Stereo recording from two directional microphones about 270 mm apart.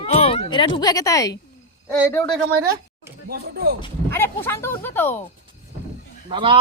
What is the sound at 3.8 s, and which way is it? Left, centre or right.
Speech, centre.